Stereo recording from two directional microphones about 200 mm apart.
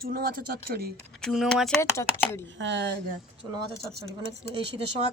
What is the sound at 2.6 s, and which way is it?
Speech, 60° right (ahead or behind).